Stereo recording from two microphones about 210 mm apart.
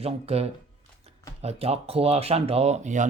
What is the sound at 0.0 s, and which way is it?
Speech, 30° right (ahead or behind).